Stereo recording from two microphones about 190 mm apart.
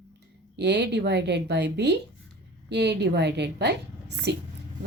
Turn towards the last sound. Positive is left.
turn(degrees=-60)  # may be behind; listen again after turning